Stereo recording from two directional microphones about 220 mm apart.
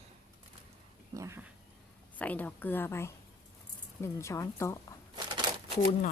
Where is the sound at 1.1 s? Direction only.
15° right (ahead or behind).